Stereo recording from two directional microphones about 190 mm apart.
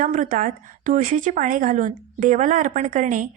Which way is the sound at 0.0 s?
45° right (ahead or behind).